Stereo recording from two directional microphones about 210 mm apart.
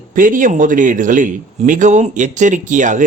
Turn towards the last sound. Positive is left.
turn(degrees=-35)  # may be behind; listen again after turning